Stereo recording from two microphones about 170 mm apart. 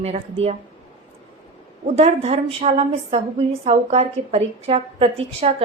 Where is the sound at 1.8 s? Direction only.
40° right (ahead or behind).